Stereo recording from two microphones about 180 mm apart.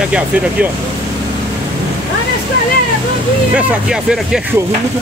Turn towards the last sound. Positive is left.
turn(degrees=-5)  # may be behind; listen again after turning